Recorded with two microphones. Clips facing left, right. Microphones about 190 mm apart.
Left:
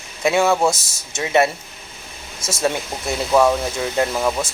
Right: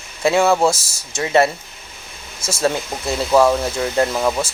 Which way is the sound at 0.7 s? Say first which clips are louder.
Right 2 dB; 20° left (ahead or behind).